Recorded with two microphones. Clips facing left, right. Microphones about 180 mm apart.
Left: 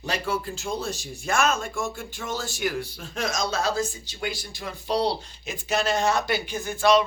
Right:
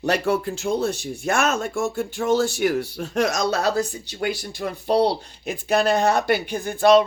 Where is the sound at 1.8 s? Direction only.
40° right (ahead or behind).